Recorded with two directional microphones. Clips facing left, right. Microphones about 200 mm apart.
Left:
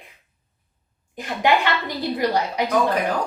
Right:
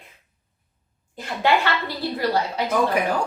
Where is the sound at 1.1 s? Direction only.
15° left (ahead or behind).